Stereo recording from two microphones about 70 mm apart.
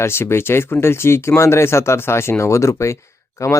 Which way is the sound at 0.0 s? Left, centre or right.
Left.